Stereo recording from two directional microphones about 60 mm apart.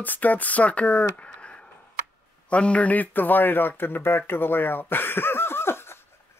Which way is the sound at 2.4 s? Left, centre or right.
Centre.